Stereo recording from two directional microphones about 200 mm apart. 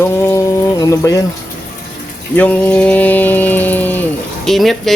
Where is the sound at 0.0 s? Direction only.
10° left (ahead or behind).